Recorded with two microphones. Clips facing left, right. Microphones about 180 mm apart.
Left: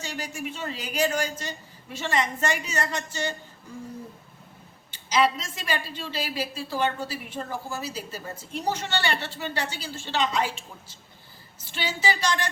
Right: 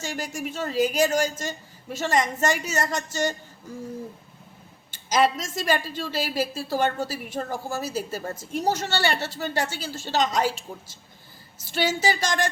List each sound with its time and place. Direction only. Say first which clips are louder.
0.0 s a woman's voice: right 3 dB; 45° right (ahead or behind)
4.9 s a woman's voice: right 2 dB; 45° right (ahead or behind)